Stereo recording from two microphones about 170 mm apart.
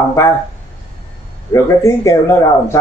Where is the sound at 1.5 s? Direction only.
15° left (ahead or behind).